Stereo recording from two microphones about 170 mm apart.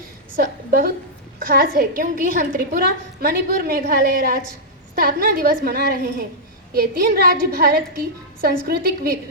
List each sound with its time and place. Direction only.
0.3 s a woman's voice: 60° right (ahead or behind)